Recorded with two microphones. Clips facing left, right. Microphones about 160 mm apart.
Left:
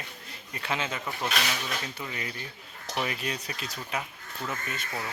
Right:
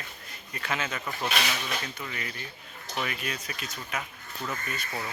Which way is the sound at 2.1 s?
25° left (ahead or behind).